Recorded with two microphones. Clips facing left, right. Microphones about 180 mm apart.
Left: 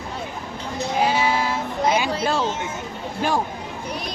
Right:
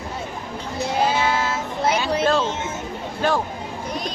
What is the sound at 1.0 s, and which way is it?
Sheep, 10° left (ahead or behind).